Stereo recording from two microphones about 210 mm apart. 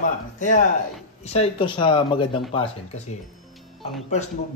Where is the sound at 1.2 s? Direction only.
30° left (ahead or behind).